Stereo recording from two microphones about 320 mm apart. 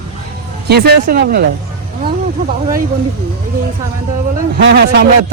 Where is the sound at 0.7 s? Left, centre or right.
Right.